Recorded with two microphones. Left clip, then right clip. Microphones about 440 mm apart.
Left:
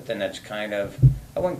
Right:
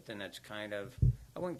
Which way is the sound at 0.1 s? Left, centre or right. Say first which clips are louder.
Left 16 dB; right.